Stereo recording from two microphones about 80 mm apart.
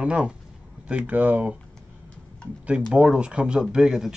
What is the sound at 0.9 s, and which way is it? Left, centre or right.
Speech, centre.